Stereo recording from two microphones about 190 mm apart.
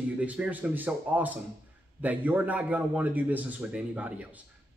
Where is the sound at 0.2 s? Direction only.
10° right (ahead or behind).